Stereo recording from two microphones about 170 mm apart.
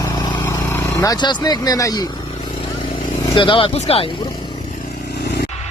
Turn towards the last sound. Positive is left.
turn(degrees=35)  # may be behind; listen again after turning